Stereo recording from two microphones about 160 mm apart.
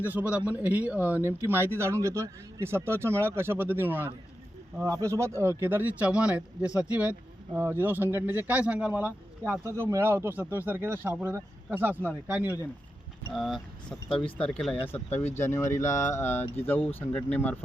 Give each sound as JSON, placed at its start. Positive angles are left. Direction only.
{"t": 0.0, "sound": "speech", "side_deg": -10}
{"t": 13.3, "sound": "speech", "side_deg": 0}
{"t": 14.1, "sound": "speech", "side_deg": 35}
{"t": 14.3, "sound": "speech", "side_deg": 5}